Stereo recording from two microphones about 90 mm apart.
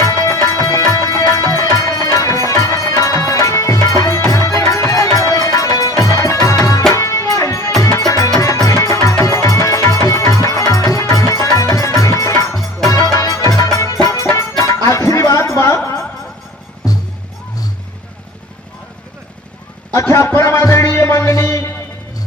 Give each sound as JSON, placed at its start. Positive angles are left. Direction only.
{"t": 0.0, "sound": "music", "side_deg": 30}
{"t": 14.8, "sound": "a sound", "side_deg": 35}
{"t": 16.8, "sound": "music", "side_deg": 45}
{"t": 19.9, "sound": "music", "side_deg": 30}